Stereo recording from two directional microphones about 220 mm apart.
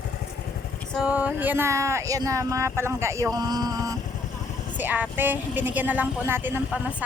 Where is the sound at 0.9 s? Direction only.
5° right (ahead or behind).